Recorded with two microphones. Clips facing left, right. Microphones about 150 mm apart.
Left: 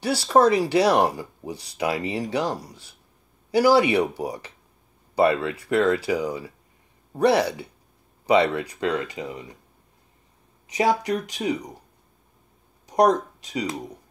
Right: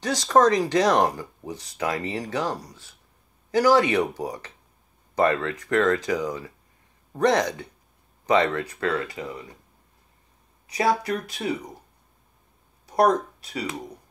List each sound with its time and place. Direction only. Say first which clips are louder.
0.0 s speech: left 1 dB; 10° left (ahead or behind)
10.7 s speech: left 1 dB; 20° left (ahead or behind)
12.8 s speech: left 1 dB; 15° left (ahead or behind)